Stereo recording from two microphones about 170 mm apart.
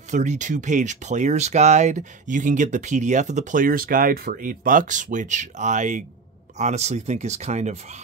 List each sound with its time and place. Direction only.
0.1 s speech: 45° right (ahead or behind)